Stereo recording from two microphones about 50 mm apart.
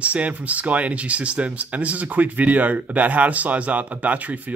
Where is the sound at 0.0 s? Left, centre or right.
Right.